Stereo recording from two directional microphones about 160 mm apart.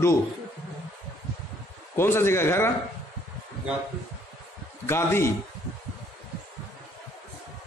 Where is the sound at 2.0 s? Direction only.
15° left (ahead or behind).